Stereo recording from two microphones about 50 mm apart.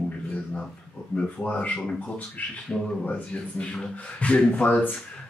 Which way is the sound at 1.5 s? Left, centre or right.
Left.